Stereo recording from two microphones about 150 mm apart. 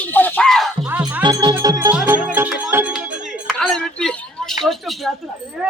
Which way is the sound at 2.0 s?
15° right (ahead or behind).